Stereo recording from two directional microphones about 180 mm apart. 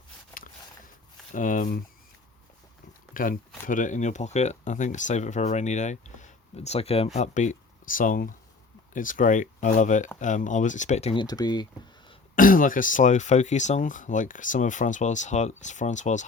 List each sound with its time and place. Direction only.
1.3 s speech: 45° left (ahead or behind)
3.1 s speech: 50° left (ahead or behind); by 12.1 s 25° left (ahead or behind)
12.4 s speech: 50° left (ahead or behind)